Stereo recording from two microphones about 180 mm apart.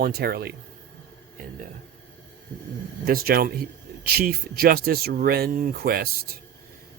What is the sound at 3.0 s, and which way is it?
Speech, 55° right (ahead or behind).